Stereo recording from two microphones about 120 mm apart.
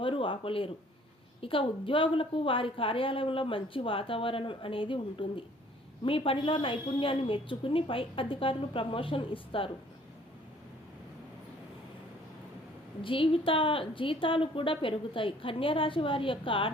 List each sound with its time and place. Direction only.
0.0 s a woman's voice: 45° left (ahead or behind)
13.0 s a woman's voice: 45° left (ahead or behind)